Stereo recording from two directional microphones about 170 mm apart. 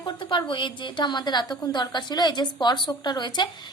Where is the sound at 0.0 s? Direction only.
30° left (ahead or behind).